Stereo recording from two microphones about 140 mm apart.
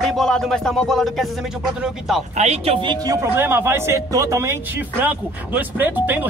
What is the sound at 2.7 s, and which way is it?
Speech, 30° right (ahead or behind).